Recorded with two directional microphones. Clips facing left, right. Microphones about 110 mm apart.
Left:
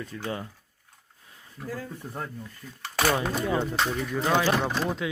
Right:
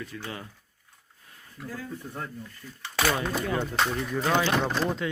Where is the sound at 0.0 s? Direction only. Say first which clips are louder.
Left 4 dB; 30° left (ahead or behind).